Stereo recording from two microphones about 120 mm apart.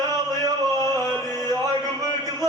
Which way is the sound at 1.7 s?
35° right (ahead or behind).